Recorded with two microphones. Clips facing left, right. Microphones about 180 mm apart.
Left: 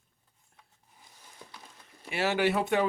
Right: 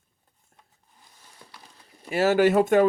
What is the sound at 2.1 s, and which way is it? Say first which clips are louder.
Speech: right 8 dB; 40° right (ahead or behind).